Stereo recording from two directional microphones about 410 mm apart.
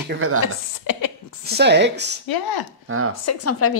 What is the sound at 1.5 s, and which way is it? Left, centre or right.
Speech, right.